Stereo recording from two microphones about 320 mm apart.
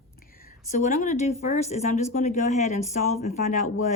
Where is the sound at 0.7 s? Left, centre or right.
Left.